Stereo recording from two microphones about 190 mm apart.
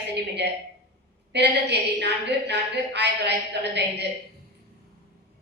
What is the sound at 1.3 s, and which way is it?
A woman's voice, 65° right (ahead or behind).